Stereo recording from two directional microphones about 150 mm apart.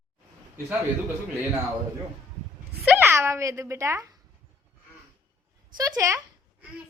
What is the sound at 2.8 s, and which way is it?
Speech, 15° right (ahead or behind).